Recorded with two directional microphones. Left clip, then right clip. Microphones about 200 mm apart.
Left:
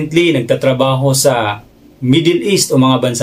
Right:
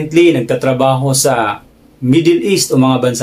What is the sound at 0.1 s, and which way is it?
Speech, centre (ahead or behind).